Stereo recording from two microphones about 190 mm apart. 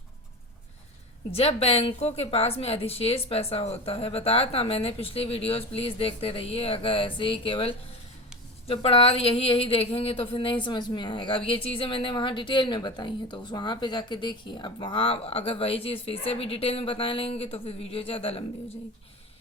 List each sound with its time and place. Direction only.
1.3 s a woman's voice: 30° left (ahead or behind)